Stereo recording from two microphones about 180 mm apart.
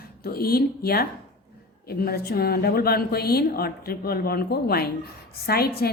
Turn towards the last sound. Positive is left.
turn(degrees=60)  # may be behind; listen again after turning